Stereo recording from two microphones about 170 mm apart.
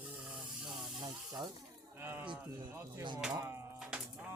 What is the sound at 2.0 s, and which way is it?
Speech, 15° right (ahead or behind).